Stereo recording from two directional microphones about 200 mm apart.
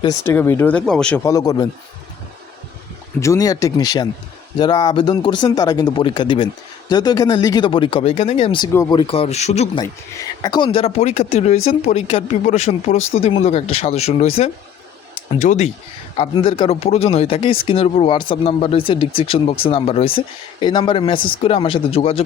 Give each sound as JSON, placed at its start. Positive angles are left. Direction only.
{"t": 0.0, "sound": "speech", "side_deg": 15}
{"t": 1.2, "sound": "speech", "side_deg": 15}
{"t": 3.2, "sound": "speech", "side_deg": 15}
{"t": 10.4, "sound": "speech", "side_deg": 20}